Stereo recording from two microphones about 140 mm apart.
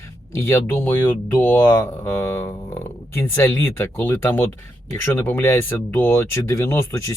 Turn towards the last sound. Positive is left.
turn(degrees=15)  # may be behind; listen again after turning